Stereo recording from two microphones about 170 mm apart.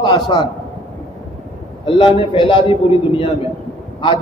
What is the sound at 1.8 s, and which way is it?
A man's voice, 30° left (ahead or behind).